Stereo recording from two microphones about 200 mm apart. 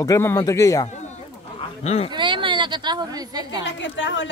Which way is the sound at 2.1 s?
25° right (ahead or behind).